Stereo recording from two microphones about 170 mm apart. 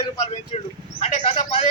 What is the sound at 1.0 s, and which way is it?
Speech, 35° left (ahead or behind).